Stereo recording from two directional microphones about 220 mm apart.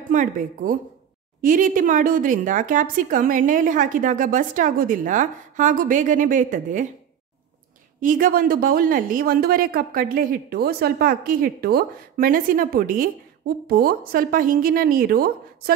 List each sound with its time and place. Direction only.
0.1 s speech: 35° right (ahead or behind)
8.0 s speech: 40° right (ahead or behind)